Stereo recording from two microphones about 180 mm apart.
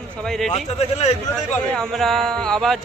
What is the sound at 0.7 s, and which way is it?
Speech, 35° left (ahead or behind).